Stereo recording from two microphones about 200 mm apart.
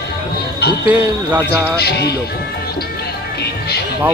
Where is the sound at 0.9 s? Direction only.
10° right (ahead or behind).